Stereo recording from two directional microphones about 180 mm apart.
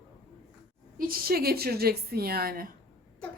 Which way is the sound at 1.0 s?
55° right (ahead or behind).